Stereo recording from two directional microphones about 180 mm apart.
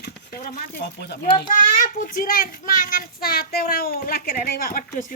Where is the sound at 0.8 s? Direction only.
65° left (ahead or behind).